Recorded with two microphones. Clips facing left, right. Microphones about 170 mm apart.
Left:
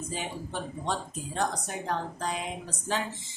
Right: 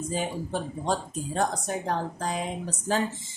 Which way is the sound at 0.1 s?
45° right (ahead or behind).